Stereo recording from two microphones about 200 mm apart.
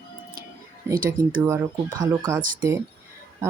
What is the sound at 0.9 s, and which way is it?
Speech, 15° right (ahead or behind).